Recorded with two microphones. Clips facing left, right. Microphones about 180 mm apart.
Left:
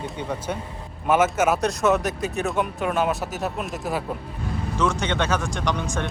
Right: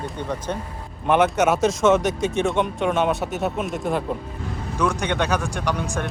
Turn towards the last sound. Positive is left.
turn(degrees=-10)  # may be behind; listen again after turning